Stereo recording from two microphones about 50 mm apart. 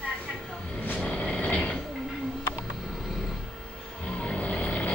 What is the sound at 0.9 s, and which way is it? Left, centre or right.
Vehicle, centre.